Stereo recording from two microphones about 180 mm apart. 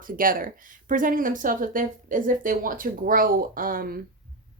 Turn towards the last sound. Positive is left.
turn(degrees=-55)  # may be behind; listen again after turning